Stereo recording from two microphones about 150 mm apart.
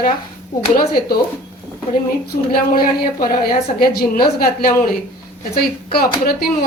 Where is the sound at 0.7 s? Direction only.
80° left.